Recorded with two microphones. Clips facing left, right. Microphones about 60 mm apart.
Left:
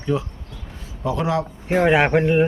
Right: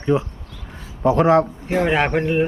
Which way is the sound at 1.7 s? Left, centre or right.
Centre.